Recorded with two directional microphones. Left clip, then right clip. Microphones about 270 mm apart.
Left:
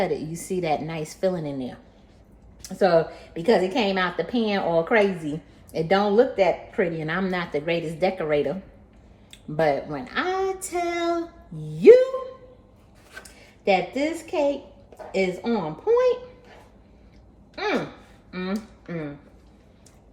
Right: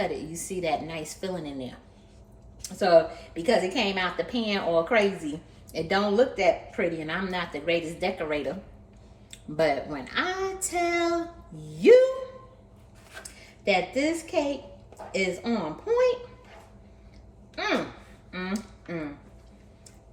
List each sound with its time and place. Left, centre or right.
0.0 s speech: left
13.4 s a woman's voice: centre
17.5 s speech: centre